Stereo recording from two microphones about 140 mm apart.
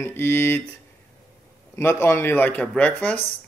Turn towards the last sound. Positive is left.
turn(degrees=10)  # may be behind; listen again after turning